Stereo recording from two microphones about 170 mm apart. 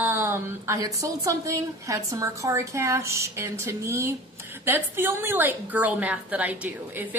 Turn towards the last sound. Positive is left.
turn(degrees=-10)  # may be behind; listen again after turning